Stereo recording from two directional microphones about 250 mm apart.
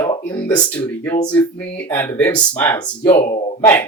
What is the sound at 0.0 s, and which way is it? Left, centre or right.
Speech, centre.